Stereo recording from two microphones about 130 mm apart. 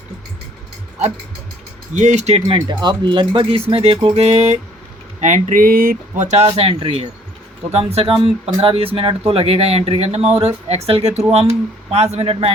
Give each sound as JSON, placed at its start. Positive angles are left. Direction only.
{"t": 1.9, "sound": "speech", "side_deg": -65}
{"t": 2.6, "sound": "speech", "side_deg": -35}
{"t": 5.2, "sound": "speech", "side_deg": -70}